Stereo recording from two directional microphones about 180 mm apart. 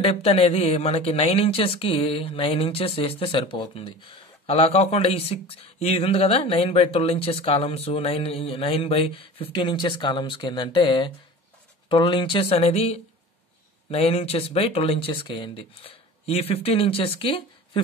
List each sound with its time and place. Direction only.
0.0 s speech: 35° left (ahead or behind)